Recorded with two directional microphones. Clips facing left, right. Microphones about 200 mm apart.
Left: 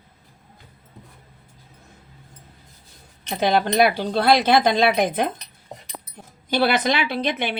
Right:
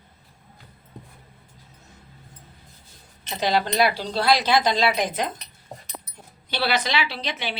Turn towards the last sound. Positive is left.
turn(degrees=55)  # may be behind; listen again after turning